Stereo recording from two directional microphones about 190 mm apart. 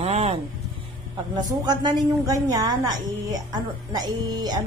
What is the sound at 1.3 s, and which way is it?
A woman's voice, 20° right (ahead or behind).